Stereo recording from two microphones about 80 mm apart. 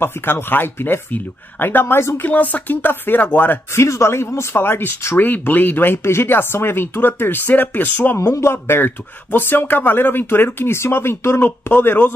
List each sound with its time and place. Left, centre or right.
0.0 s speech: left
3.8 s speech: left
8.2 s speech: left